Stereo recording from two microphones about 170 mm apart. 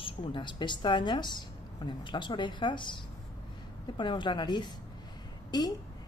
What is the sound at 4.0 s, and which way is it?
A woman's voice, 30° left (ahead or behind).